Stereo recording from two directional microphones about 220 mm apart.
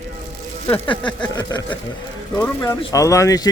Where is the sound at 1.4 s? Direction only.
15° left (ahead or behind).